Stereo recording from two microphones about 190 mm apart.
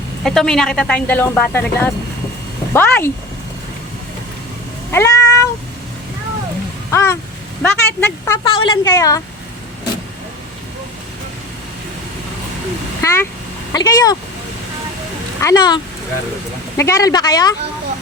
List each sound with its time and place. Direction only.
0.3 s speech: 5° left (ahead or behind)
4.9 s cat: 15° left (ahead or behind)
6.9 s speech: 15° left (ahead or behind)
8.4 s speech: 25° left (ahead or behind)
13.0 s a sound: 15° left (ahead or behind)
13.7 s speech: 20° left (ahead or behind)
15.4 s speech: 20° left (ahead or behind)